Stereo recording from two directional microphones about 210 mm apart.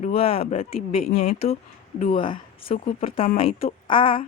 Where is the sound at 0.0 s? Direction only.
30° left (ahead or behind).